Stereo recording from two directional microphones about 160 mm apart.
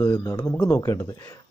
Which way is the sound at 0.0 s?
20° left (ahead or behind).